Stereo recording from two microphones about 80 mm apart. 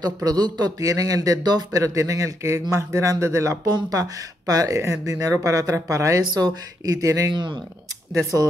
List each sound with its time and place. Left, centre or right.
0.0 s speech: right
6.2 s speech: right